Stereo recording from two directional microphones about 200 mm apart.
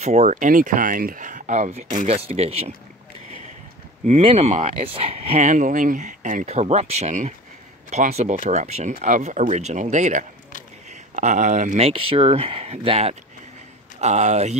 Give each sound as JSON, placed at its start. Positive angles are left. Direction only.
{"t": 0.0, "sound": "speech", "side_deg": -35}
{"t": 4.0, "sound": "speech", "side_deg": -30}